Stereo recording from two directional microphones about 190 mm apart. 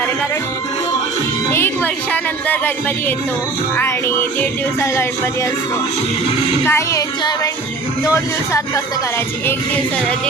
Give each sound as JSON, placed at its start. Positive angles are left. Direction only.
{"t": 1.5, "sound": "music", "side_deg": 10}
{"t": 3.8, "sound": "music", "side_deg": 15}
{"t": 6.7, "sound": "music", "side_deg": 15}